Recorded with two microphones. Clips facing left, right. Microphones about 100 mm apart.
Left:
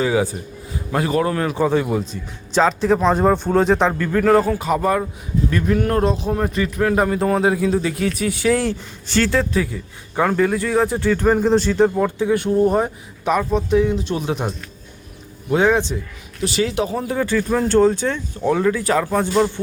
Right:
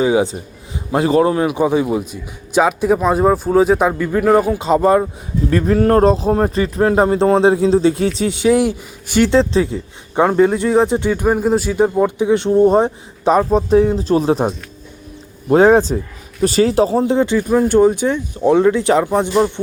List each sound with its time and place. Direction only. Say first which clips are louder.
0.0 s a man's voice: right 4 dB; 20° right (ahead or behind)